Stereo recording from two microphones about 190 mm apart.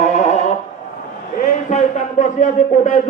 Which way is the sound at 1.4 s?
40° left (ahead or behind).